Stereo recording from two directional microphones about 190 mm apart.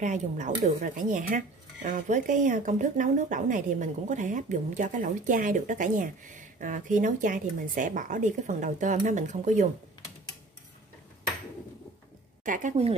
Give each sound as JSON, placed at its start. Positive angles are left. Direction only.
{"t": 0.0, "sound": "speech", "side_deg": -40}
{"t": 12.4, "sound": "speech", "side_deg": -40}